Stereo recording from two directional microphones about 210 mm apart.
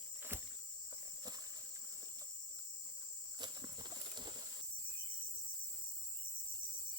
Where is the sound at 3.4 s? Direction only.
20° right (ahead or behind).